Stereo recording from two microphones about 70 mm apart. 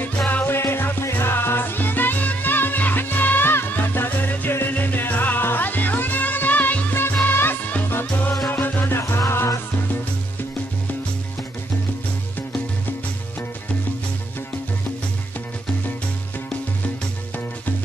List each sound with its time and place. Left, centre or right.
0.3 s music: left